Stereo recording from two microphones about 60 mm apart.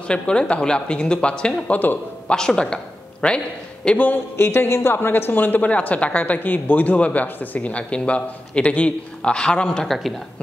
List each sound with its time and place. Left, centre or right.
0.1 s a man's voice: centre
1.7 s a man's voice: left
2.2 s a man's voice: centre
4.4 s a man's voice: left; by 9.9 s centre